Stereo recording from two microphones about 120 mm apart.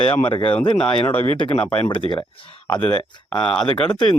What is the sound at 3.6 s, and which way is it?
Speech, 50° left (ahead or behind).